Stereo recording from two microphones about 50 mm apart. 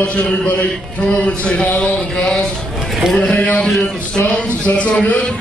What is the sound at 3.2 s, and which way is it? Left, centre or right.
Speech, left.